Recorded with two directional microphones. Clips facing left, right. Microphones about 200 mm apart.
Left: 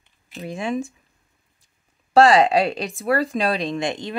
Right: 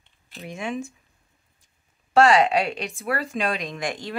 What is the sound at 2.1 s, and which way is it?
Speech, 35° left (ahead or behind).